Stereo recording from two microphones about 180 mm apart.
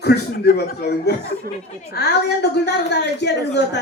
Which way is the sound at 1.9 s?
65° left (ahead or behind).